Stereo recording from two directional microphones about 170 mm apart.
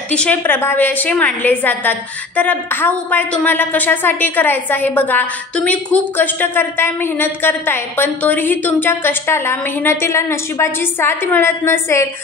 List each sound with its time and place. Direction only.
0.1 s a woman's voice: 10° left (ahead or behind)